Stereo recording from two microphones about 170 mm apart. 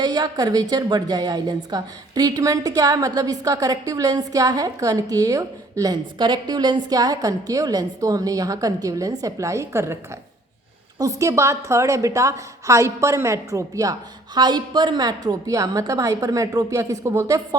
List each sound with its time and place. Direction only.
0.0 s a woman's voice: 25° right (ahead or behind)